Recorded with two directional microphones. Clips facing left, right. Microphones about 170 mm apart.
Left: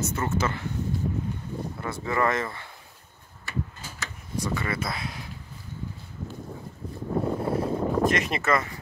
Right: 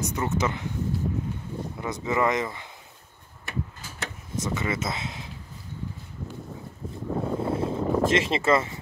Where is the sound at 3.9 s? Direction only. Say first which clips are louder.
Right 1 dB; 20° right (ahead or behind).